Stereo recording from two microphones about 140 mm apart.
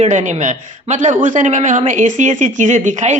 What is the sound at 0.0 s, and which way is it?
A woman's voice, 60° right (ahead or behind).